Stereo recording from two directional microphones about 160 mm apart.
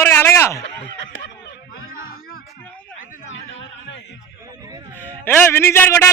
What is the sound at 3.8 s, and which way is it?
Music, 90° left.